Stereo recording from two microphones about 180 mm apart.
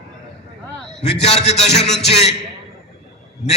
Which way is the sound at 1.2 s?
35° left (ahead or behind).